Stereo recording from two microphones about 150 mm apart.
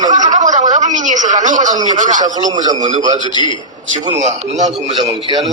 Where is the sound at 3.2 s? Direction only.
30° left (ahead or behind).